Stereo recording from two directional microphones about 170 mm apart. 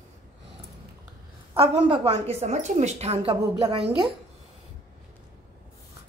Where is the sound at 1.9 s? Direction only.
35° right (ahead or behind).